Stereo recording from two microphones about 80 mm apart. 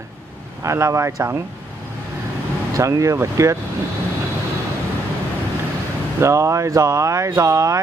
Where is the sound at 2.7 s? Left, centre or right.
Right.